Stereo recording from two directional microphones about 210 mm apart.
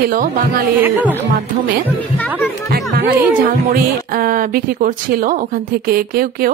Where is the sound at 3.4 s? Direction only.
45° right (ahead or behind).